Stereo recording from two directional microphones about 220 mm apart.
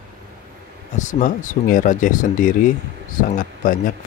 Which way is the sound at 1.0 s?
35° left (ahead or behind).